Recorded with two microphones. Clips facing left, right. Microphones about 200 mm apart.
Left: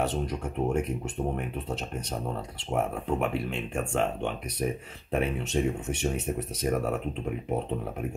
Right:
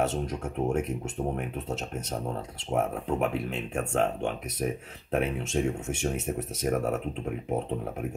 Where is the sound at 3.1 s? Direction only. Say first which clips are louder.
Even; 5° right (ahead or behind).